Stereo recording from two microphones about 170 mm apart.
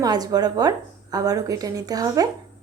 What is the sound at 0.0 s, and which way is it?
A woman's voice, 20° right (ahead or behind).